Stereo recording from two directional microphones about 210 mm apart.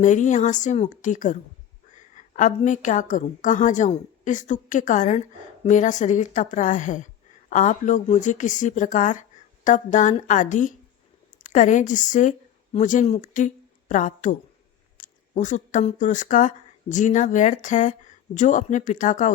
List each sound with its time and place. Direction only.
0.0 s a woman's voice: 35° left (ahead or behind)